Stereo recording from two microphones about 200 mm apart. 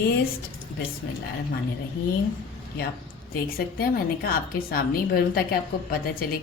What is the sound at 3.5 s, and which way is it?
A woman's voice, 50° left (ahead or behind).